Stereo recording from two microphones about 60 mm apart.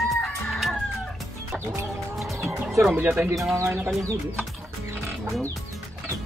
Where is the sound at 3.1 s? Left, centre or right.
Right.